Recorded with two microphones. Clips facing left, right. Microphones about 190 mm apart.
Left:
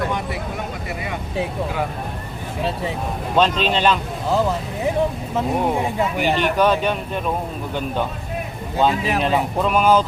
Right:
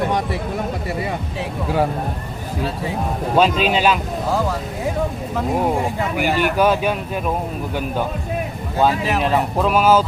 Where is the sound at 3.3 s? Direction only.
5° right (ahead or behind).